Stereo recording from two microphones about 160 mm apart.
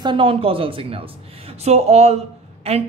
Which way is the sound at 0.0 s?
30° right (ahead or behind).